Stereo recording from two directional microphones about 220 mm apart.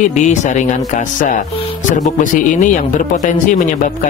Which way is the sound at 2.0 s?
35° left (ahead or behind).